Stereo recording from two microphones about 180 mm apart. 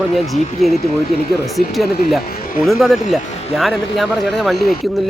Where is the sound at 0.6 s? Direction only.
Centre (ahead or behind).